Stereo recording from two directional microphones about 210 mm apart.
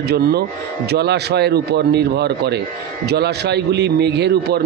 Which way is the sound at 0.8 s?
50° right (ahead or behind).